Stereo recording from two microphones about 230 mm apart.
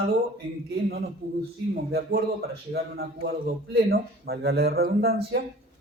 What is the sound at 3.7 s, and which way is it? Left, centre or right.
Speech, right.